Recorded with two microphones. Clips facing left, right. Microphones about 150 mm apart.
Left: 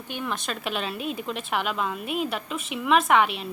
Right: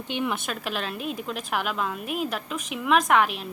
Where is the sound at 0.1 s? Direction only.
15° right (ahead or behind).